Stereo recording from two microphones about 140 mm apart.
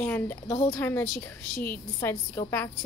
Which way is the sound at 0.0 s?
15° left (ahead or behind).